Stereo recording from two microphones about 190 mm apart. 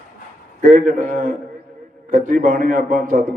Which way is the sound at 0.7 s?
45° right (ahead or behind).